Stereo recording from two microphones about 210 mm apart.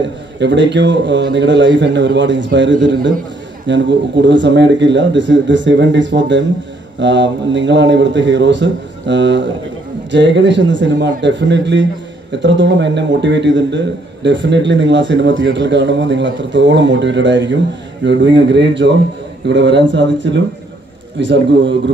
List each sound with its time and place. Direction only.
0.4 s speech: 55° right (ahead or behind)